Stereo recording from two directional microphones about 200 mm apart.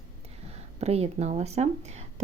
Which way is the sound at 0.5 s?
30° right (ahead or behind).